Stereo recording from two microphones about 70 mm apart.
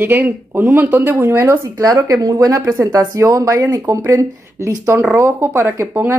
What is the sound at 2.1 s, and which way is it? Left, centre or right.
A woman's voice, right.